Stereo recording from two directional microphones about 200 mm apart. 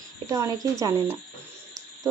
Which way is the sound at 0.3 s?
15° right (ahead or behind).